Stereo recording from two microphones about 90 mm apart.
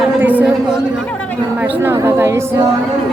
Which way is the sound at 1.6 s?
25° right (ahead or behind).